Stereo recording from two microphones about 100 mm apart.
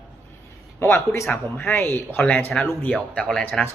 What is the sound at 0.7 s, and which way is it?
A man's voice, 25° left (ahead or behind).